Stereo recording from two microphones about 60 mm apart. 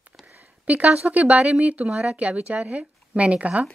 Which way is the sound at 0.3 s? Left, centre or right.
Right.